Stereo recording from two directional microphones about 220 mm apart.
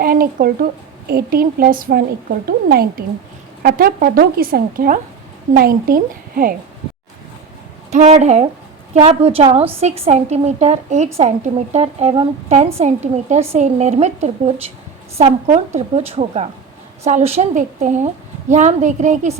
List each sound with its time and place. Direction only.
0.0 s a woman's voice: 40° right (ahead or behind)
7.9 s a woman's voice: 30° right (ahead or behind)